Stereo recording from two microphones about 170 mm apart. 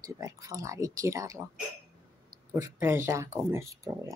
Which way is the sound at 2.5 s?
15° right (ahead or behind).